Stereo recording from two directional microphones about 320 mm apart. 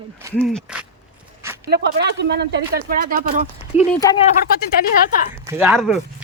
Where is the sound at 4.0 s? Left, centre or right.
Centre.